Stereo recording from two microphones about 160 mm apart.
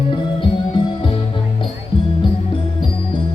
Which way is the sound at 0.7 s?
30° left (ahead or behind).